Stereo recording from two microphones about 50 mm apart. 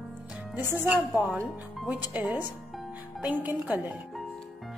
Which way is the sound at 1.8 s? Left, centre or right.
Right.